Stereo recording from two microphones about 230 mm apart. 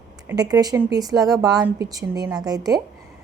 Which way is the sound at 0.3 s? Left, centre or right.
Centre.